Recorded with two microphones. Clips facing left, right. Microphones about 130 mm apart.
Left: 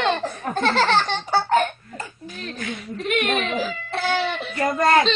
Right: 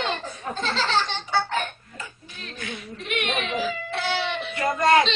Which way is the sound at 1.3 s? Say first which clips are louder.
Left 6 dB; 40° left (ahead or behind).